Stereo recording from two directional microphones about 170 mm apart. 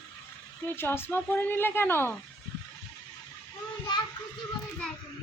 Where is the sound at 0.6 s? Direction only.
10° left (ahead or behind).